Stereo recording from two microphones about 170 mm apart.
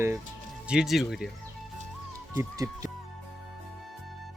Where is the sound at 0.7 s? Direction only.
5° right (ahead or behind).